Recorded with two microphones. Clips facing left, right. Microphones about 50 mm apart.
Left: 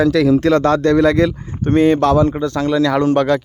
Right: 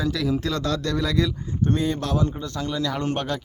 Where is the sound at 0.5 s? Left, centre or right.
Left.